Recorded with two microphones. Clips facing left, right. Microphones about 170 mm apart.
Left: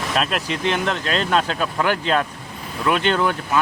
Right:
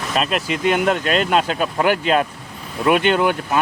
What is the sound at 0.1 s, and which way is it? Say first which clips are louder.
Speech: right 3 dB; centre (ahead or behind).